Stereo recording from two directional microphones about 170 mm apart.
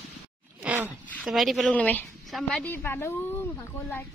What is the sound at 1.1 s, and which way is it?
A woman's voice, centre (ahead or behind).